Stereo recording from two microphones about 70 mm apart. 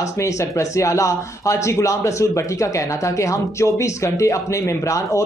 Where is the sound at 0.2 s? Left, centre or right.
Left.